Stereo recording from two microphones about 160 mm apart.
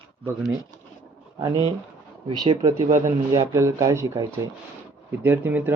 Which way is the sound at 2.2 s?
25° right (ahead or behind).